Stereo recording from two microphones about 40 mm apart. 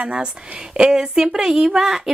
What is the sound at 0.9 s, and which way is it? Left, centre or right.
A woman's voice, centre.